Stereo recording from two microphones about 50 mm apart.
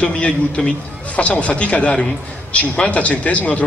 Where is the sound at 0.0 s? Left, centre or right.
Centre.